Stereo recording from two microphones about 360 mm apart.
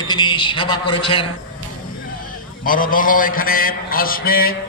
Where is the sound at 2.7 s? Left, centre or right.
Left.